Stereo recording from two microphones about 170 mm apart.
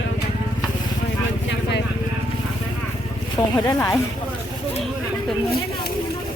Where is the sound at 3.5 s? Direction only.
20° left (ahead or behind).